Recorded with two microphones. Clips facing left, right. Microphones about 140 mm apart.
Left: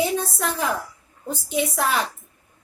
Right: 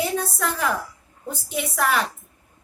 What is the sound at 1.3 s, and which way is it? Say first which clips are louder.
Speech: left 4 dB; 25° left (ahead or behind).